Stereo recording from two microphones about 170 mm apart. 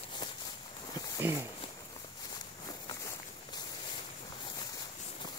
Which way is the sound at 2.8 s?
25° left (ahead or behind).